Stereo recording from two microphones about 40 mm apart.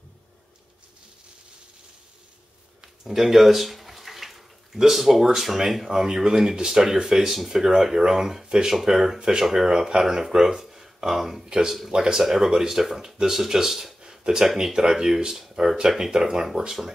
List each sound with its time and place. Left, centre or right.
3.0 s a sound: centre
5.2 s speech: centre
11.4 s speech: centre
12.2 s speech: centre
14.0 s a sound: centre
14.5 s speech: centre